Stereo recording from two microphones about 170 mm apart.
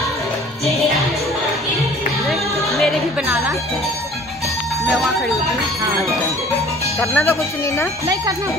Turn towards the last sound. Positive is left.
turn(degrees=15)  # may be behind; listen again after turning